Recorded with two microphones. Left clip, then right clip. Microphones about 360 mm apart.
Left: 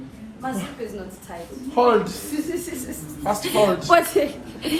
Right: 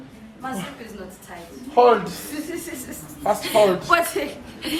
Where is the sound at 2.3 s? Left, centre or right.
Centre.